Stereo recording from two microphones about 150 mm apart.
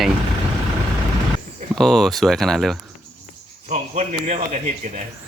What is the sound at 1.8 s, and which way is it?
Speech, 5° left (ahead or behind).